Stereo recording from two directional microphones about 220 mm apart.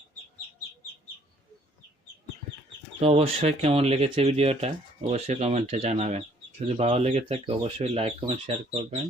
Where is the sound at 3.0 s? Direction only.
30° right (ahead or behind).